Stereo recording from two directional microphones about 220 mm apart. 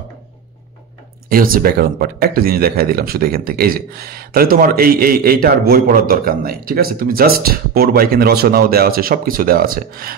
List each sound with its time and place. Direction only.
1.3 s speech: 40° right (ahead or behind)